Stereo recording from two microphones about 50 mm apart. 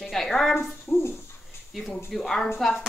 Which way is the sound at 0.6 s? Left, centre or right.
Left.